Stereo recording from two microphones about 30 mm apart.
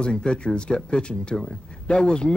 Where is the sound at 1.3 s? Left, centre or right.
Centre.